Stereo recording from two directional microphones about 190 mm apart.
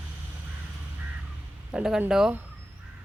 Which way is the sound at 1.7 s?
5° right (ahead or behind).